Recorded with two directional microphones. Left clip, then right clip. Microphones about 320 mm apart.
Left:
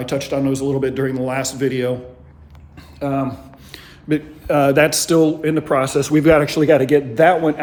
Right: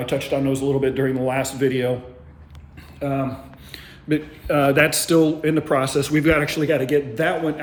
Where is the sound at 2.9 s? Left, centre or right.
Centre.